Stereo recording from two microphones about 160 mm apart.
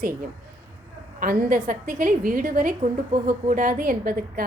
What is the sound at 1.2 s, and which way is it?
A woman's voice, 60° right (ahead or behind).